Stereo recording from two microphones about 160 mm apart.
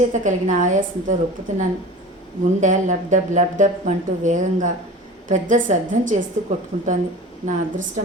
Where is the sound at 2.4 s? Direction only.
50° right (ahead or behind).